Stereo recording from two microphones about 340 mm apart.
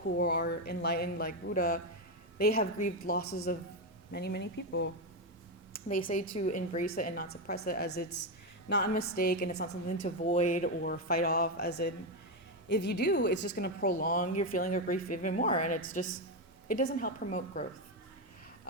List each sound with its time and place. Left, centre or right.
0.2 s a woman's voice: left